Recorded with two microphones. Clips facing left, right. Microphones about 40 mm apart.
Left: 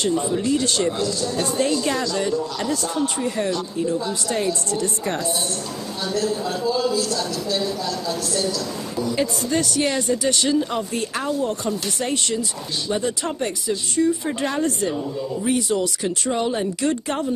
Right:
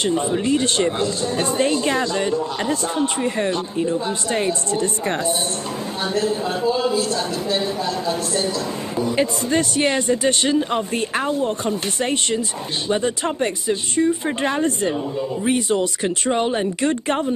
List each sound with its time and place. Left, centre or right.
0.0 s speech: right